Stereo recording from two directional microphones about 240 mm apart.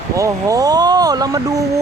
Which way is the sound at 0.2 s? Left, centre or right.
Centre.